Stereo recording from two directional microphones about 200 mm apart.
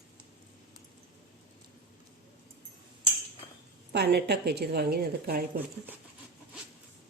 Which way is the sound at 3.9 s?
50° right (ahead or behind).